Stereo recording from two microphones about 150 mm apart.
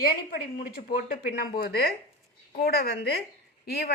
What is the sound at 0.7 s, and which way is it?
A woman's voice, 80° left.